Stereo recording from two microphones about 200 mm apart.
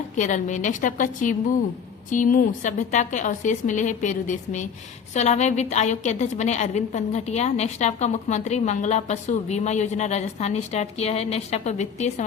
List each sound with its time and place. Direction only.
0.2 s a woman's voice: 40° left (ahead or behind)